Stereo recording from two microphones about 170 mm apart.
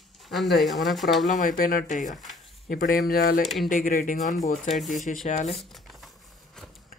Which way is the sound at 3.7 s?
55° left (ahead or behind).